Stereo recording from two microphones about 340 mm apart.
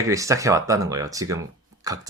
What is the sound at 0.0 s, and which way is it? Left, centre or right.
Speech, centre.